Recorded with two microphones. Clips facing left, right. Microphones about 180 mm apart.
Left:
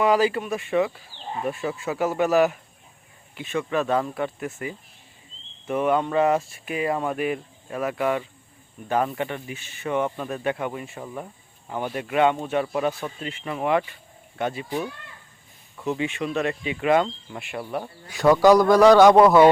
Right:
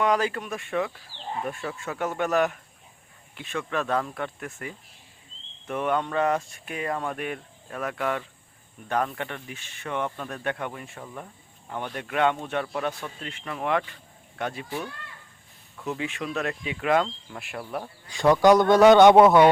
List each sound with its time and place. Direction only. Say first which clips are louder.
0.0 s speech: left 4 dB; 5° left (ahead or behind)
15.8 s speech: left 5 dB; centre (ahead or behind)